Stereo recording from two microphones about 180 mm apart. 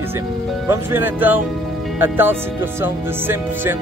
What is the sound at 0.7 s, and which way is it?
Speech, 10° right (ahead or behind).